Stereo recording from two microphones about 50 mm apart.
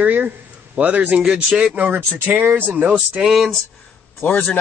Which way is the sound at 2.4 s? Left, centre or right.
Right.